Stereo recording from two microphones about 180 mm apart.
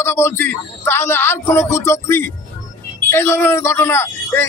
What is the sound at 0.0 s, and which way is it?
A man's voice, 15° left (ahead or behind).